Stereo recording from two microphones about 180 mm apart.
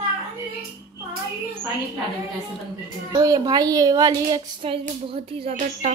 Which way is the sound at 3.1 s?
25° right (ahead or behind).